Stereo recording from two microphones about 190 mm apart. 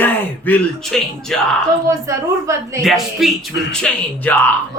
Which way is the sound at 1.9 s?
15° right (ahead or behind).